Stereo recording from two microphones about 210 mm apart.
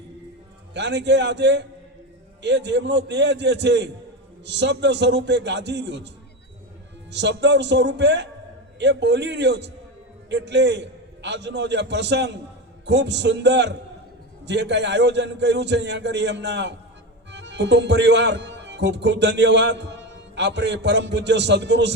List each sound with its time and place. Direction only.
0.7 s a man's voice: 55° right (ahead or behind)
7.1 s a man's voice: 55° right (ahead or behind)